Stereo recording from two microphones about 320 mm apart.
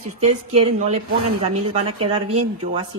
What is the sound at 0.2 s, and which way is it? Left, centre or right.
A woman's voice, centre.